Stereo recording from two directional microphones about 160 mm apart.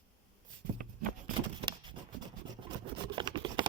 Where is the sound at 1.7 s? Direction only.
30° right (ahead or behind).